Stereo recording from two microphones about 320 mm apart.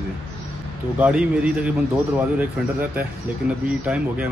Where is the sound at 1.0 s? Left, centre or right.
Centre.